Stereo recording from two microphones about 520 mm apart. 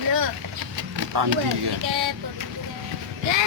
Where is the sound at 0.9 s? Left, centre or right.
Right.